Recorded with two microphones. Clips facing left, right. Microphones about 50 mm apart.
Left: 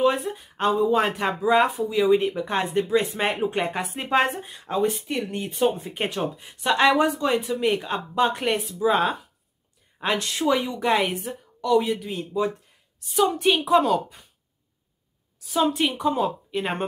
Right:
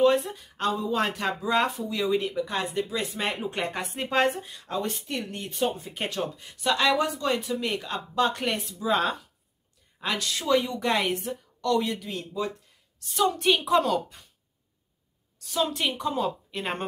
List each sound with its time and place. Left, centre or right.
0.0 s speech: centre
2.0 s speech: left
3.5 s speech: centre
4.3 s speech: left
5.3 s speech: centre
5.8 s speech: left
9.9 s speech: left
10.7 s speech: centre
15.3 s a woman's voice: centre